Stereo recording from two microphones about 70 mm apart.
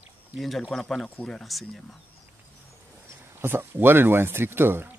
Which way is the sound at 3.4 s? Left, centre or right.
Right.